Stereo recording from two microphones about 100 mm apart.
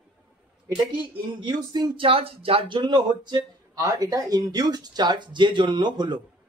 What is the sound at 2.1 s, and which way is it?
Speech, 70° right (ahead or behind).